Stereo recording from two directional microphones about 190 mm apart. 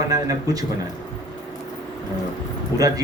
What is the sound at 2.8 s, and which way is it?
Speech, 20° right (ahead or behind).